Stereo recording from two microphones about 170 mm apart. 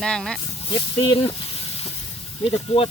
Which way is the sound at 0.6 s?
30° left (ahead or behind).